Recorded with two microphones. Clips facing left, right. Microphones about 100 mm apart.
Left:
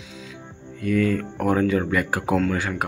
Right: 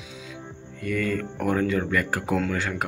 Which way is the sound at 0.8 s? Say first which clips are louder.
Left 5 dB; centre (ahead or behind).